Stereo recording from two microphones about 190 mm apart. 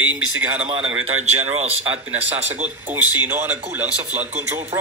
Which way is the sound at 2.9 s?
10° right (ahead or behind).